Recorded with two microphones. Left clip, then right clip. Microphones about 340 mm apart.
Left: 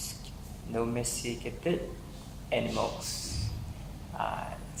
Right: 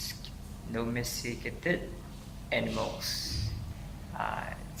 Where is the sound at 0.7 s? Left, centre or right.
Centre.